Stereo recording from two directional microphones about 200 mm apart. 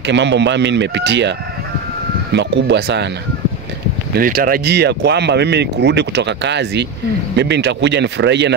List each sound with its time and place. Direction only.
0.0 s speech: 60° right (ahead or behind)
2.3 s speech: 60° right (ahead or behind)
4.2 s speech: 45° right (ahead or behind)